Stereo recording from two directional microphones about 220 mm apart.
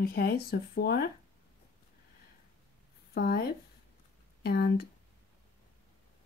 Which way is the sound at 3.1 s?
45° left (ahead or behind).